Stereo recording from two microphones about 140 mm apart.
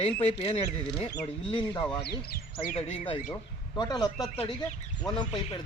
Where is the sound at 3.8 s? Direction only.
30° left (ahead or behind).